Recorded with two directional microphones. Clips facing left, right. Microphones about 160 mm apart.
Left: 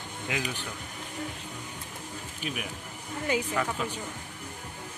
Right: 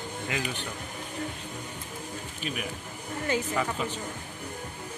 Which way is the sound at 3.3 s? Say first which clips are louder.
Even; 15° left (ahead or behind).